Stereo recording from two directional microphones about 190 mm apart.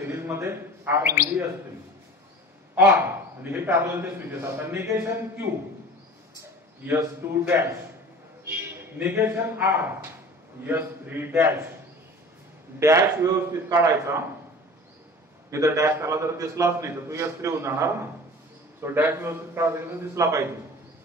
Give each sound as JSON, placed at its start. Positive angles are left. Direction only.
{"t": 0.0, "sound": "speech", "side_deg": -10}
{"t": 2.7, "sound": "a man's voice", "side_deg": -10}
{"t": 6.8, "sound": "a man's voice", "side_deg": -10}
{"t": 12.7, "sound": "a man's voice", "side_deg": -15}
{"t": 15.5, "sound": "a man's voice", "side_deg": -15}